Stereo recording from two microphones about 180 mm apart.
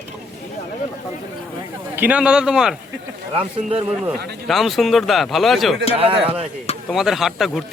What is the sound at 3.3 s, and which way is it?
Speech, 30° right (ahead or behind).